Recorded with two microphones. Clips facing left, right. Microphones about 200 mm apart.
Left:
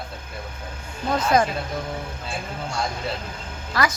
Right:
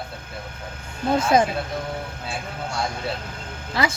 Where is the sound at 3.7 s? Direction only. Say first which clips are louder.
Even; 25° right (ahead or behind).